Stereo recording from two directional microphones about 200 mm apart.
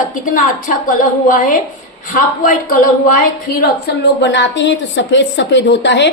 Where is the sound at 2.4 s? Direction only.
45° left (ahead or behind).